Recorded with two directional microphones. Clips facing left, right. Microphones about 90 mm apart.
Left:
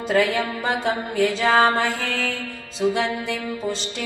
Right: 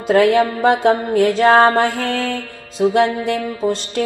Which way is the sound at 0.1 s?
60° right (ahead or behind).